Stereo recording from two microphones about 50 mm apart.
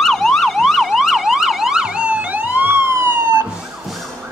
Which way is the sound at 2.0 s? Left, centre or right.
Right.